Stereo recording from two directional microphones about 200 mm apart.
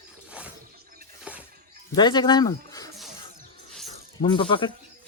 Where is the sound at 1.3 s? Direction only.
5° right (ahead or behind).